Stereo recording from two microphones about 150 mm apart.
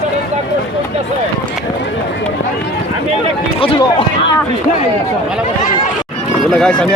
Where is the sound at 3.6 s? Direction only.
40° left (ahead or behind).